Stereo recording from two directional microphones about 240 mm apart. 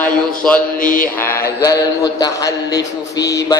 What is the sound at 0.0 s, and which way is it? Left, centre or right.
Speech, centre.